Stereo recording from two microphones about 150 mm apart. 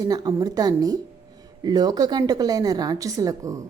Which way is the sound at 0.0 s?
25° right (ahead or behind).